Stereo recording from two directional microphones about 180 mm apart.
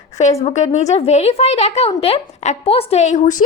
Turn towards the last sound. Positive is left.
turn(degrees=40)  # may be behind; listen again after turning